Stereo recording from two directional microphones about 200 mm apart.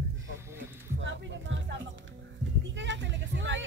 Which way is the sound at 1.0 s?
65° right (ahead or behind).